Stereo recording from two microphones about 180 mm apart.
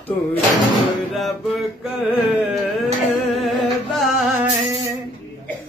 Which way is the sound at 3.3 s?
Centre (ahead or behind).